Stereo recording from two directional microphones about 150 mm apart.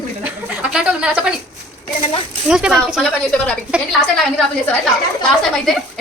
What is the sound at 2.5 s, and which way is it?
Speech, 5° right (ahead or behind).